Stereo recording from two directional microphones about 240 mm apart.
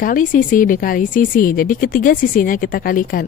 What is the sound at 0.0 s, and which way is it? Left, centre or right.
Speech, left.